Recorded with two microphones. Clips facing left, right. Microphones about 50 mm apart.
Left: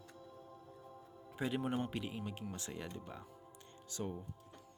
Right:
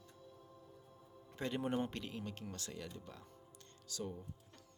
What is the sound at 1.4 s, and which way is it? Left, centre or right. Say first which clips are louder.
Speech: left 1 dB; centre.